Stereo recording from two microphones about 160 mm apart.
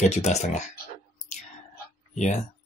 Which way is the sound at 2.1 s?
45° left (ahead or behind).